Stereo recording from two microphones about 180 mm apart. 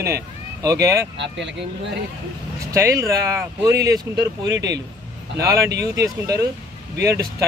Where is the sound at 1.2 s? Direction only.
85° right.